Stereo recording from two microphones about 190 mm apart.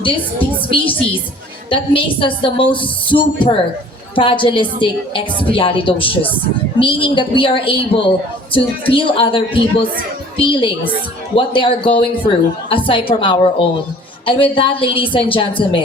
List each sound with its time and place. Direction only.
0.5 s a woman's voice: 25° left (ahead or behind)